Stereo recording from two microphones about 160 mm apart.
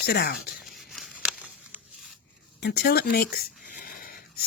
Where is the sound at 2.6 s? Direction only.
90° left; by 3.5 s 70° left (ahead or behind).